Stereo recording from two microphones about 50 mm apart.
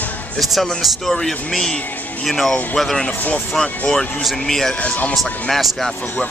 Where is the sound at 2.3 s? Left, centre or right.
Centre.